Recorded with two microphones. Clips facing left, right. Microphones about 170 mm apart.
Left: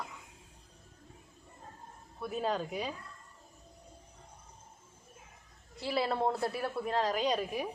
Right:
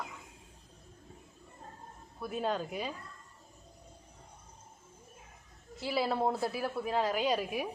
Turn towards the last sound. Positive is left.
turn(degrees=-5)  # may be behind; listen again after turning